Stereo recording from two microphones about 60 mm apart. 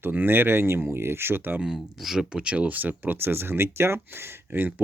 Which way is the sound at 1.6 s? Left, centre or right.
Centre.